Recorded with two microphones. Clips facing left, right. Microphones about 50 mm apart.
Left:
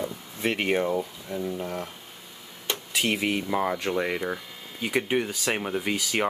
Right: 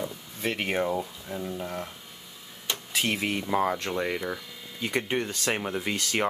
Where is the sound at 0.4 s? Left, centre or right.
Centre.